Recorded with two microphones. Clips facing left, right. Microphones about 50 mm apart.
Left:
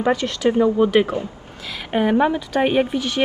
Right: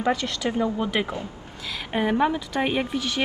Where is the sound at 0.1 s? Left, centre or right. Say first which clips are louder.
Left 7 dB; left.